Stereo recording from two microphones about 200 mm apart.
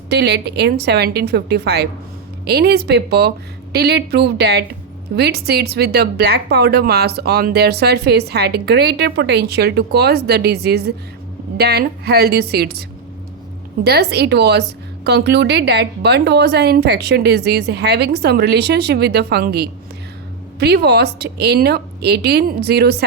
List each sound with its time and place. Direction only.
0.1 s a woman's voice: 55° right (ahead or behind)
13.8 s a woman's voice: 55° right (ahead or behind)